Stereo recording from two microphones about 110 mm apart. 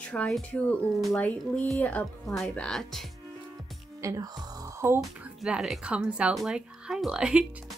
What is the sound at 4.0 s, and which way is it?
Speech, 30° right (ahead or behind).